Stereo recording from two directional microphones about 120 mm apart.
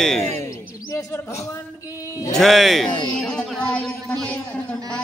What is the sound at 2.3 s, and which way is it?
Speech, centre (ahead or behind).